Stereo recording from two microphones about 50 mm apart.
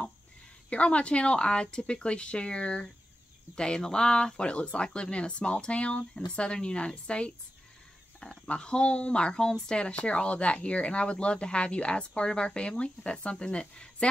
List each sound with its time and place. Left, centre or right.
0.7 s speech: left
8.5 s speech: centre